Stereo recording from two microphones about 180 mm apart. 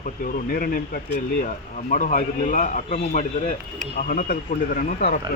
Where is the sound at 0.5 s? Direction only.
55° left (ahead or behind).